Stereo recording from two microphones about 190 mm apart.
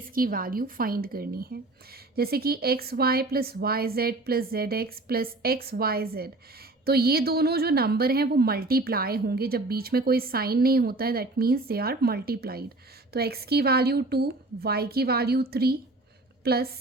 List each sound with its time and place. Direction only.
0.1 s a woman's voice: 50° right (ahead or behind)